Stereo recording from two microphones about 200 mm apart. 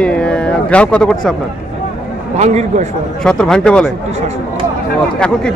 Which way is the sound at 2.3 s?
35° right (ahead or behind).